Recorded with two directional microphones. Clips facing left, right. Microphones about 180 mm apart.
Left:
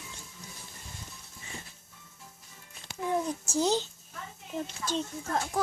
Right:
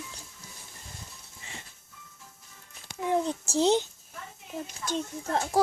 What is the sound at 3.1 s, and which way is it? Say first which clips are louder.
Speech: right 3 dB; 30° right (ahead or behind).